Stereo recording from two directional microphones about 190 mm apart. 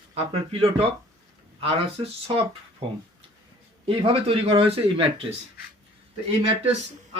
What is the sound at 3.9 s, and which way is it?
Speech, 30° right (ahead or behind).